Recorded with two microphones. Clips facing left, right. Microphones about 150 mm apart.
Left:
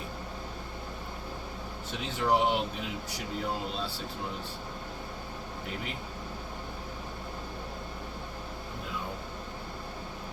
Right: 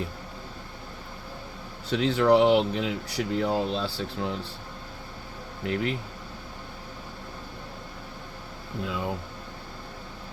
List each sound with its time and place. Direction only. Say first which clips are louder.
1.9 s speech: right 8 dB; 85° right
5.6 s speech: right 12 dB; 85° right